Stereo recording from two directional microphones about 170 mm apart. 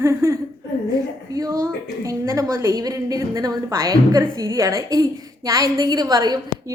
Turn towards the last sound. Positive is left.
turn(degrees=-20)  # may be behind; listen again after turning